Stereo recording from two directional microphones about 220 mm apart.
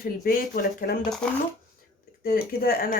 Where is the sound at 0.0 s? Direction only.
40° left (ahead or behind).